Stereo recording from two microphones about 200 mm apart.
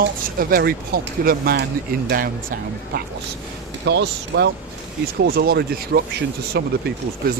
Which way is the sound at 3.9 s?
60° right (ahead or behind).